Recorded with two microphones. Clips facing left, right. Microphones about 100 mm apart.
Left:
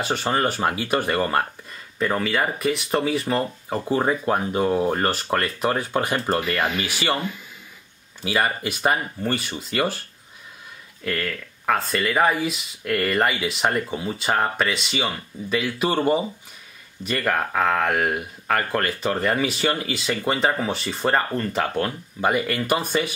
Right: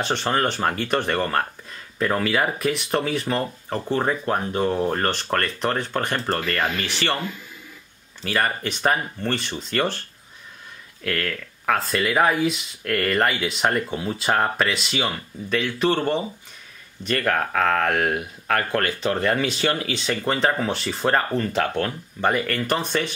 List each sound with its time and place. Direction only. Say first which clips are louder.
0.0 s speech: even; 5° left (ahead or behind)
8.2 s speech: left 1 dB; 10° left (ahead or behind)
11.1 s speech: even; centre (ahead or behind)